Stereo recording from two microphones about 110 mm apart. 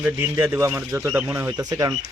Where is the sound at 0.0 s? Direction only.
20° right (ahead or behind).